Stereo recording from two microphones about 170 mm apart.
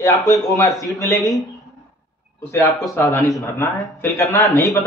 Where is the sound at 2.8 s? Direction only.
20° left (ahead or behind).